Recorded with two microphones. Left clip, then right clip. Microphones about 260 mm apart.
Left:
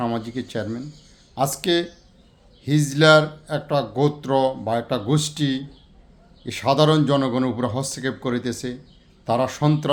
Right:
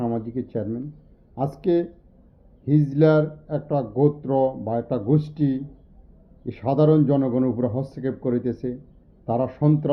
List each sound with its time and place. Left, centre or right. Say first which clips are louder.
0.0 s speech: left 1 dB; centre